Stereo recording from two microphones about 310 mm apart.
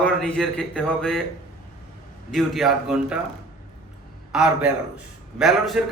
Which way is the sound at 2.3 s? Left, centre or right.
Centre.